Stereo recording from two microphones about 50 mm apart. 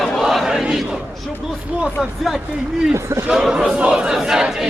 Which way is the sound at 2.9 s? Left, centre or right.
Right.